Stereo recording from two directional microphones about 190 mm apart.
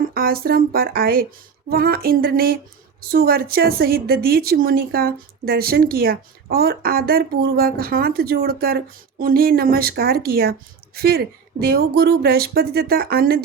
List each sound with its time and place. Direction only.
0.1 s a woman's voice: 50° right (ahead or behind)